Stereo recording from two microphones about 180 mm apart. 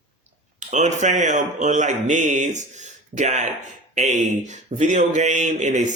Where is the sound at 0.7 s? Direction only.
40° right (ahead or behind).